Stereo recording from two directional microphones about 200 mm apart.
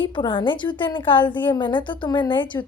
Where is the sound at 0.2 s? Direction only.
25° left (ahead or behind).